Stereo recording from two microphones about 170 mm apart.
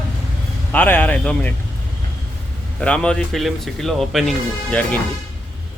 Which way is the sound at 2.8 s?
5° left (ahead or behind).